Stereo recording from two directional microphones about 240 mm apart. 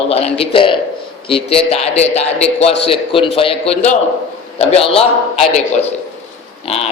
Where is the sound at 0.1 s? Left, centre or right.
Left.